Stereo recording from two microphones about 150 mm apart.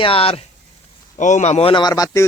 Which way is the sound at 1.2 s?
55° left (ahead or behind).